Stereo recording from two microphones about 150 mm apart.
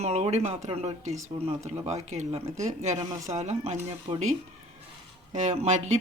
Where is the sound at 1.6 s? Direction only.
50° right (ahead or behind).